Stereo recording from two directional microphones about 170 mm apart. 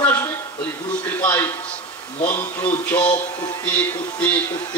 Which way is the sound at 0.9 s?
10° left (ahead or behind).